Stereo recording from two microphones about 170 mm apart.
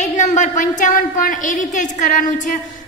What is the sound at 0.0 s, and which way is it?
Speech, 45° left (ahead or behind).